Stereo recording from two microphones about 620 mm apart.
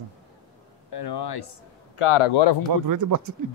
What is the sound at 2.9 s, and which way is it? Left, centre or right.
Speech, right.